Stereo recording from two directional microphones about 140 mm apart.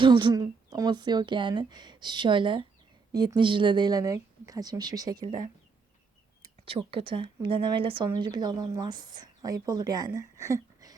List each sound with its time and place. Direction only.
0.0 s speech: 35° right (ahead or behind)
6.7 s speech: 40° right (ahead or behind)